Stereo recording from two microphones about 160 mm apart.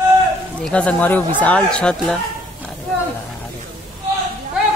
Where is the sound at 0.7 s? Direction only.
10° left (ahead or behind).